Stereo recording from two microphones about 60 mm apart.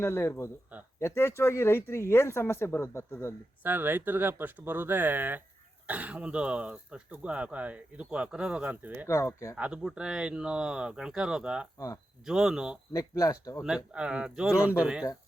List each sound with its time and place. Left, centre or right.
0.0 s speech: left
3.6 s speech: right
9.0 s speech: left
9.6 s speech: centre
12.9 s speech: left
13.6 s speech: centre